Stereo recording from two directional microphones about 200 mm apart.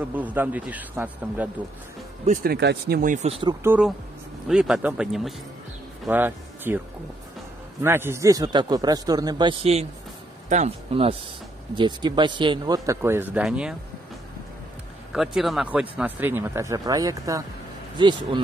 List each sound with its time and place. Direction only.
0.0 s speech: 10° right (ahead or behind)
2.2 s speech: 50° right (ahead or behind); by 3.5 s 30° right (ahead or behind)
3.6 s speech: 10° right (ahead or behind)
7.8 s speech: 10° right (ahead or behind)
15.1 s speech: centre (ahead or behind); by 18.4 s 25° right (ahead or behind)